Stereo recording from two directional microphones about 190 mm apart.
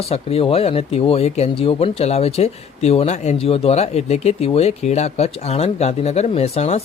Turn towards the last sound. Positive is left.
turn(degrees=35)  # may be behind; listen again after turning